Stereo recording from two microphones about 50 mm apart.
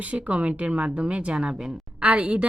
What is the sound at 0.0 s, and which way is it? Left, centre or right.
Speech, right.